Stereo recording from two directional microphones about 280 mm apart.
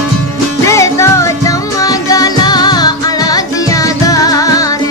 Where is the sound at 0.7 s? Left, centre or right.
Centre.